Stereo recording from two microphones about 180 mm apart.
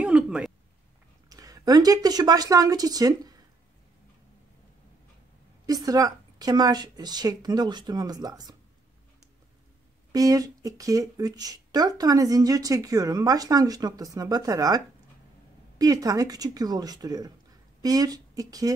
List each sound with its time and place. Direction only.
0.0 s a sound: 5° right (ahead or behind)
1.3 s speech: 20° right (ahead or behind)
5.7 s speech: 20° right (ahead or behind)
10.1 s speech: 20° right (ahead or behind)
15.8 s speech: 20° right (ahead or behind)